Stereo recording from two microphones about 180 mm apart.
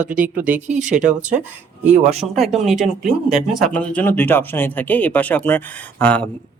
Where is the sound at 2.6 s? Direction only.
Centre (ahead or behind).